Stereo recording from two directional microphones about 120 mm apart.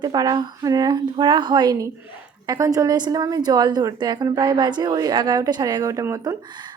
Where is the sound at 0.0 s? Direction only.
35° right (ahead or behind).